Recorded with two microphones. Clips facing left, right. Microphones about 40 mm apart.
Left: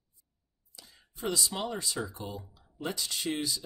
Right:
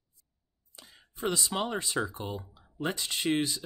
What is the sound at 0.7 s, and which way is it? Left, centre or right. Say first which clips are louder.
Speech: right 5 dB; right.